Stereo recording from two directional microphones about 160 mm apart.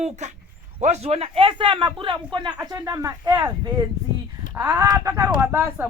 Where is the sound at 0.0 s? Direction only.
45° right (ahead or behind); by 2.6 s 30° right (ahead or behind).